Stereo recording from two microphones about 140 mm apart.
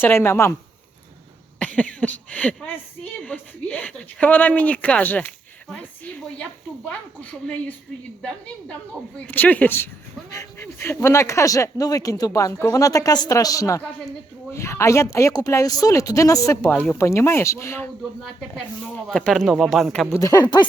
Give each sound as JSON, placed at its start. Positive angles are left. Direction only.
{"t": 0.0, "sound": "speech", "side_deg": 15}
{"t": 1.5, "sound": "speech", "side_deg": 10}
{"t": 18.2, "sound": "speech", "side_deg": 5}
{"t": 20.1, "sound": "speech", "side_deg": 25}